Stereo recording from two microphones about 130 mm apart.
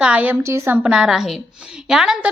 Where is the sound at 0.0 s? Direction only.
10° right (ahead or behind).